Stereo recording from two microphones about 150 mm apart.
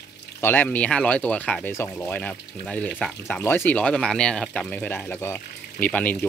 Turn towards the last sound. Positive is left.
turn(degrees=10)  # may be behind; listen again after turning